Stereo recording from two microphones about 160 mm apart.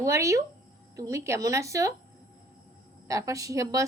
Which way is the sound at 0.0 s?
20° right (ahead or behind).